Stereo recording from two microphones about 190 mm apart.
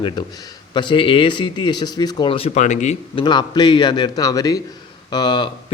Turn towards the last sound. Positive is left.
turn(degrees=20)  # may be behind; listen again after turning